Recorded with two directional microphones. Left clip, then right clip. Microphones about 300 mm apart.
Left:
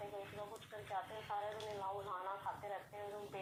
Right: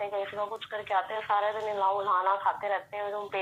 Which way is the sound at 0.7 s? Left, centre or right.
Right.